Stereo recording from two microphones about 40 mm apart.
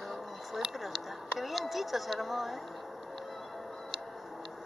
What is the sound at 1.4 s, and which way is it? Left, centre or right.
Speech, centre.